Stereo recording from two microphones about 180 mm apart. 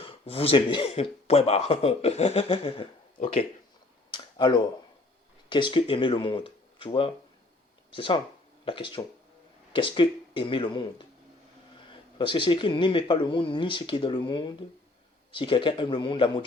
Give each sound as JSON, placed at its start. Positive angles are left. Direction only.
{"t": 0.0, "sound": "speech", "side_deg": 30}
{"t": 4.1, "sound": "a sound", "side_deg": 25}
{"t": 5.5, "sound": "speech", "side_deg": 25}